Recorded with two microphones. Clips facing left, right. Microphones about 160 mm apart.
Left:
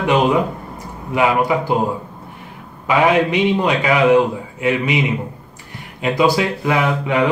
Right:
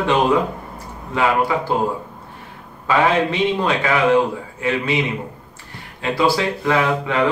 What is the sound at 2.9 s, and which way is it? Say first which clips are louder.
Speech: left 2 dB; 15° left (ahead or behind).